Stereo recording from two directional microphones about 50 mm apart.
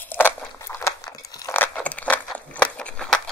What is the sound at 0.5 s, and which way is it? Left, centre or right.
Crunch, left.